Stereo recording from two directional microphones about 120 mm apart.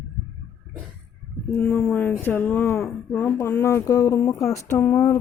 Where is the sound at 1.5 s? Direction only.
10° left (ahead or behind).